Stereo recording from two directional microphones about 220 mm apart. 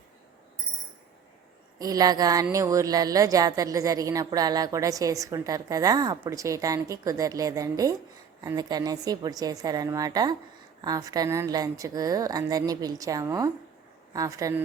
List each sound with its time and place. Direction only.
1.8 s speech: 15° right (ahead or behind)